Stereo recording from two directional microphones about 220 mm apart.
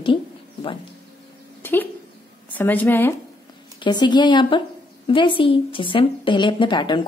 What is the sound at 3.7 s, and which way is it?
A woman's voice, 20° left (ahead or behind).